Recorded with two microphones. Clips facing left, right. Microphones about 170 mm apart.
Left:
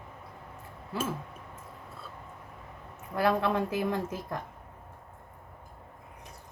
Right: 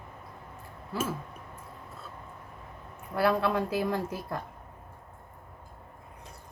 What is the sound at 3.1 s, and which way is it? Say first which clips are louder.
Speech: right 1 dB; 20° left (ahead or behind).